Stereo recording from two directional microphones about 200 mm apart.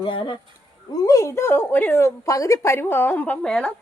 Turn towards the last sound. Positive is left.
turn(degrees=5)  # may be behind; listen again after turning